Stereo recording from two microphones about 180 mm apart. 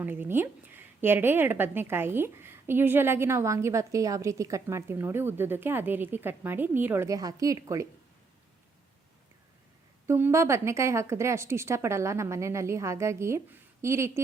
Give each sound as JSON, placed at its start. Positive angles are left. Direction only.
{"t": 0.0, "sound": "a woman's voice", "side_deg": -10}
{"t": 10.1, "sound": "a woman's voice", "side_deg": -15}